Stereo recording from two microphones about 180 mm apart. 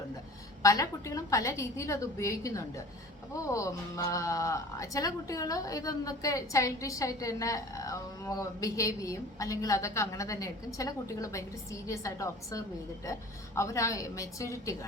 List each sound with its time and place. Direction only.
0.6 s speech: 20° left (ahead or behind)